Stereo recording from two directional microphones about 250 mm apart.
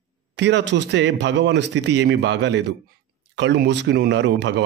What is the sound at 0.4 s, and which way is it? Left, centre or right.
A man's voice, right.